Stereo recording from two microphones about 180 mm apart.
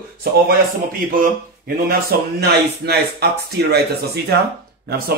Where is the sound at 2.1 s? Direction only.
55° right (ahead or behind).